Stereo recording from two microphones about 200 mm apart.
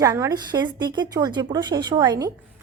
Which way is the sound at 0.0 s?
20° right (ahead or behind).